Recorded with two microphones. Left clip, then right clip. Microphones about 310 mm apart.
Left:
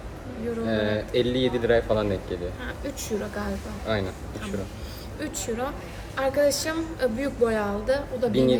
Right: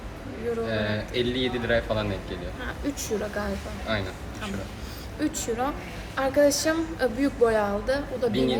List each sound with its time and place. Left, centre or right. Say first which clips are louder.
0.7 s speech: left 3 dB; left
2.6 s a woman's voice: right 1 dB; centre
3.9 s speech: left 2 dB; left
5.2 s a woman's voice: right 3 dB; centre
8.3 s speech: left 5 dB; left